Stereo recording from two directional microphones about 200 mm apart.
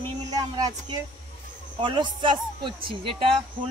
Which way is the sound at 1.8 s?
25° right (ahead or behind).